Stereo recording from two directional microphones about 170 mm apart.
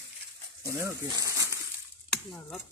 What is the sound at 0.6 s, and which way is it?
Speech, 15° right (ahead or behind).